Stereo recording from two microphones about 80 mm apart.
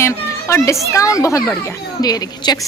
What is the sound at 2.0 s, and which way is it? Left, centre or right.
Speech, left.